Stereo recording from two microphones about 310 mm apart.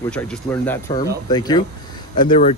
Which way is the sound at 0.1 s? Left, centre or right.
Centre.